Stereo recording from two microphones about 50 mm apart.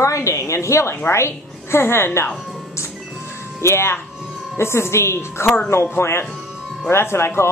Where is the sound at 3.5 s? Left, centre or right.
Left.